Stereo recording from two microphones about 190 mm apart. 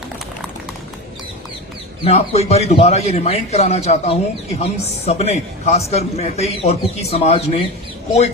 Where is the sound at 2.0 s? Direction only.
35° left (ahead or behind).